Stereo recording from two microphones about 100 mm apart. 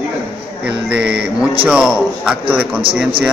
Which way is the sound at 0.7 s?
10° right (ahead or behind).